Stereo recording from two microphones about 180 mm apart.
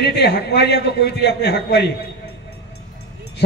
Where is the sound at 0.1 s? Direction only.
70° left (ahead or behind).